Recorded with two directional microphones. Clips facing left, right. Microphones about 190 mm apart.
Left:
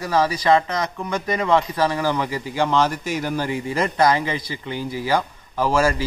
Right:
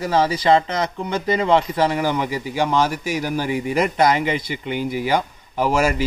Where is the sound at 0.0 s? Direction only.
25° right (ahead or behind).